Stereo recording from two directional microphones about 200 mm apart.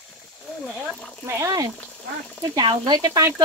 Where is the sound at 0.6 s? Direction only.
5° right (ahead or behind).